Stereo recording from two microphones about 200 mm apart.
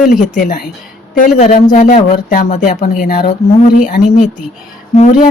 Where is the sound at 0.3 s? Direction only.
40° left (ahead or behind).